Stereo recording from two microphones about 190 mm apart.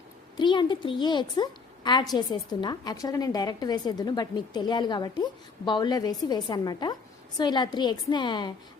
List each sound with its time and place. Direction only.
0.3 s a woman's voice: 25° left (ahead or behind)